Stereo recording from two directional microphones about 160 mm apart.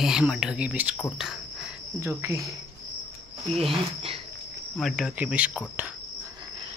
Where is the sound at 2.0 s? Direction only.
15° right (ahead or behind).